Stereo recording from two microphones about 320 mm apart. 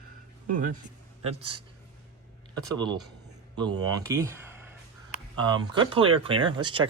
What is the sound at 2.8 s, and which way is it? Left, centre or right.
Speech, centre.